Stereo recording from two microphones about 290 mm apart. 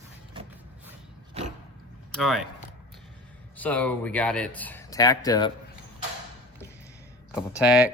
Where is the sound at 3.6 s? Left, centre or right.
Centre.